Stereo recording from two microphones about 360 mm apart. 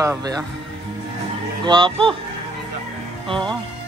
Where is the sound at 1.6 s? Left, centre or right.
Centre.